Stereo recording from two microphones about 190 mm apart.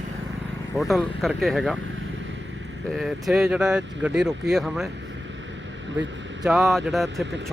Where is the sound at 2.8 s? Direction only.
Centre (ahead or behind).